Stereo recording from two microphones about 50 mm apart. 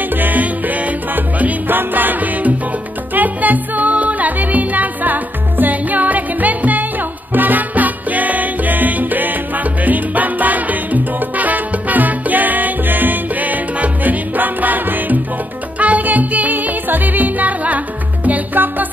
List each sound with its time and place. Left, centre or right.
0.2 s music: right